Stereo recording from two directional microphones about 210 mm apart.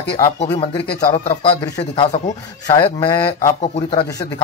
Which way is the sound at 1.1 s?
25° left (ahead or behind).